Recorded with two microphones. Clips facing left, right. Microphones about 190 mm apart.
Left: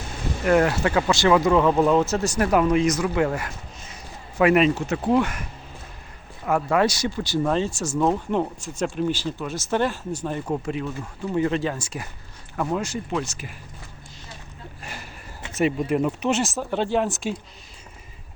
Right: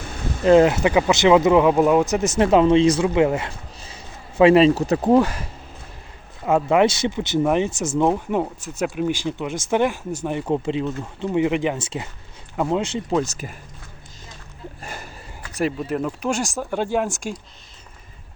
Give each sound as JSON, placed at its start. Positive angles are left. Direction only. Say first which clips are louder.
{"t": 0.4, "sound": "speech", "louder": "right 6 dB", "side_deg": -20}
{"t": 6.4, "sound": "speech", "louder": "right 4 dB", "side_deg": -20}
{"t": 13.1, "sound": "speech", "louder": "right 6 dB", "side_deg": -40}
{"t": 15.5, "sound": "speech", "louder": "left 2 dB", "side_deg": 5}
{"t": 16.7, "sound": "speech", "louder": "even", "side_deg": -10}